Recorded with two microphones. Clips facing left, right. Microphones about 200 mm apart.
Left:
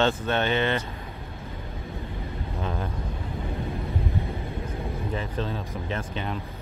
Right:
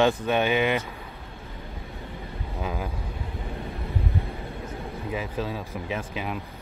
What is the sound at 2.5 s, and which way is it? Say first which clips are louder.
Speech: right 1 dB; 5° right (ahead or behind).